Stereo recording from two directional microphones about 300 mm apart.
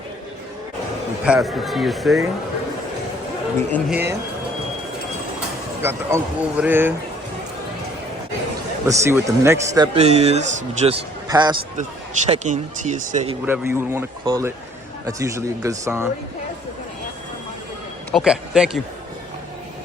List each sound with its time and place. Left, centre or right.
1.2 s speech: centre
3.7 s speech: centre
5.8 s speech: centre
8.9 s speech: centre; by 13.3 s right
13.4 s speech: centre
18.1 s speech: centre